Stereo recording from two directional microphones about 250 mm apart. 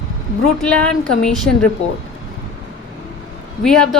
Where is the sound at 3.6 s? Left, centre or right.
Centre.